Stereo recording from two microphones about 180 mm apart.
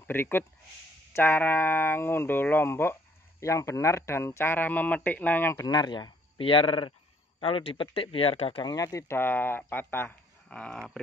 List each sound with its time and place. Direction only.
0.0 s speech: 10° left (ahead or behind); by 8.7 s 30° left (ahead or behind)
8.7 s speech: 20° left (ahead or behind)